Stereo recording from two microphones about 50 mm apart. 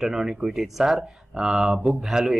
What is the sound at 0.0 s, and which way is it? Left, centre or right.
Speech, centre.